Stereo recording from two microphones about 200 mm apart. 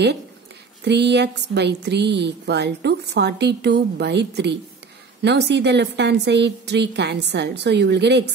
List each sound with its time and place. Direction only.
0.8 s a woman's voice: 60° right (ahead or behind)